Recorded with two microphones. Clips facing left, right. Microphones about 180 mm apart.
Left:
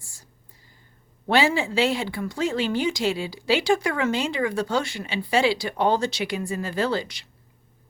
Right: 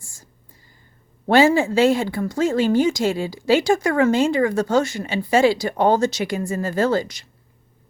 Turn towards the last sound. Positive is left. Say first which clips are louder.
# right 5 dB
turn(degrees=-45)  # may be behind; listen again after turning